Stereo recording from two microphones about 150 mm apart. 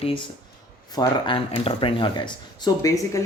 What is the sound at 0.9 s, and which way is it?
Speech, 35° left (ahead or behind).